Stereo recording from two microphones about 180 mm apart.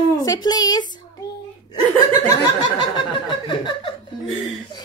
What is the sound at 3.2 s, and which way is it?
Speech, 25° left (ahead or behind).